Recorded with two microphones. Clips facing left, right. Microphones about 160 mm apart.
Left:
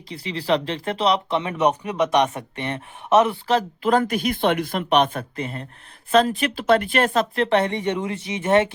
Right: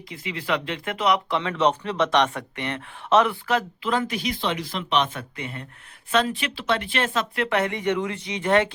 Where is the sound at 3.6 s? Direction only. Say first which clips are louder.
Left 8 dB; 45° left (ahead or behind).